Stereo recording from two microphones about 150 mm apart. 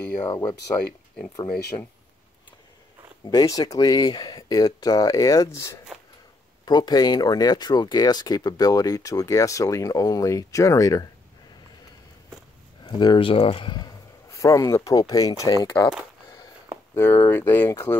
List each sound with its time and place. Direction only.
1.7 s speech: 30° left (ahead or behind)
3.3 s speech: 25° left (ahead or behind)
12.8 s speech: 30° left (ahead or behind)
14.3 s speech: 20° left (ahead or behind)
16.9 s speech: 15° left (ahead or behind)